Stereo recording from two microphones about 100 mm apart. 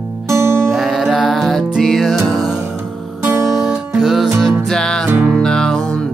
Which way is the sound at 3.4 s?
5° right (ahead or behind).